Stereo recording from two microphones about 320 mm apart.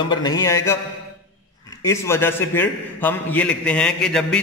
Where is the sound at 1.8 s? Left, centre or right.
Centre.